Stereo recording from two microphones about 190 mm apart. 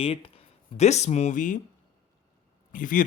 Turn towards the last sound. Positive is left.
turn(degrees=45)  # may be behind; listen again after turning